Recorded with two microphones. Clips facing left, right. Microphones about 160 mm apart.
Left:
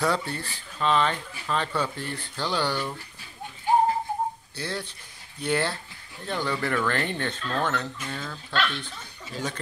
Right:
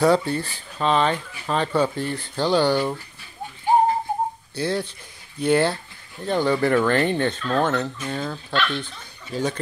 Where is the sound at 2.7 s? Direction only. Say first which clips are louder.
Right 8 dB; 45° right (ahead or behind).